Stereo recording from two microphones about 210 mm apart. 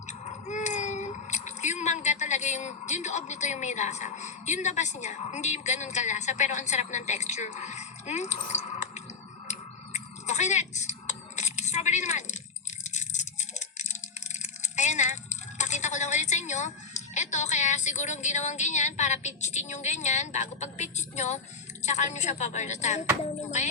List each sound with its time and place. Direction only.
0.1 s speech: 35° left (ahead or behind)
9.5 s a sound: 35° left (ahead or behind)
21.8 s a woman's voice: 35° left (ahead or behind)